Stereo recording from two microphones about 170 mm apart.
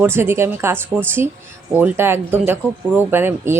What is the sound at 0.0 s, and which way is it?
Speech, 15° right (ahead or behind).